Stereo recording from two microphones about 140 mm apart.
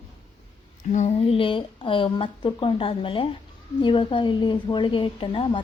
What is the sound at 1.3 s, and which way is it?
A woman's voice, 40° left (ahead or behind).